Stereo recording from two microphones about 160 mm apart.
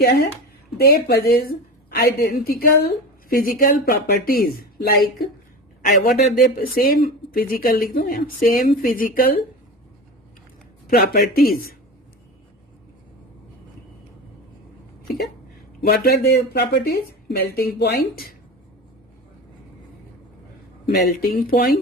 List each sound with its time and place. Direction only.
0.0 s a woman's voice: 80° left; by 9.4 s 60° left (ahead or behind)
10.8 s a woman's voice: 70° left (ahead or behind)
15.9 s a woman's voice: 80° left
20.9 s a woman's voice: 70° left (ahead or behind)